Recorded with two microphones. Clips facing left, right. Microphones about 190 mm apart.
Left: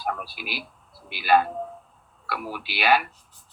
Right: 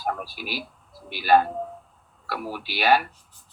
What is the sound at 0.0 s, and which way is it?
Speech, 40° right (ahead or behind).